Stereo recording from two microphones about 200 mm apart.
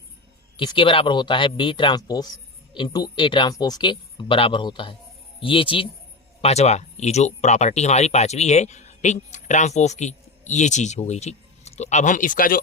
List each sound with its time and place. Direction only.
0.5 s speech: 25° left (ahead or behind); by 12.5 s 40° left (ahead or behind)